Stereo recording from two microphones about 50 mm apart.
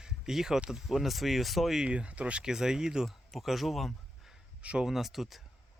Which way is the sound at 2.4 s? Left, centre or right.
Centre.